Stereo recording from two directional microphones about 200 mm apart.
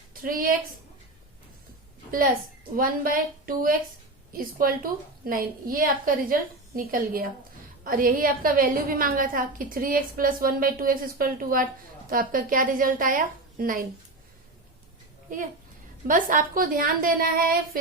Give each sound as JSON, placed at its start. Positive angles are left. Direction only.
{"t": 0.1, "sound": "a woman's voice", "side_deg": -45}
{"t": 2.7, "sound": "a woman's voice", "side_deg": -45}
{"t": 16.0, "sound": "a woman's voice", "side_deg": -40}